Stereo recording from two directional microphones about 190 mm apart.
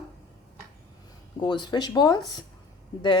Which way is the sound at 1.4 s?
25° left (ahead or behind).